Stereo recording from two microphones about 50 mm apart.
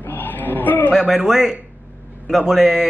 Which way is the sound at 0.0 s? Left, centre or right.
Left.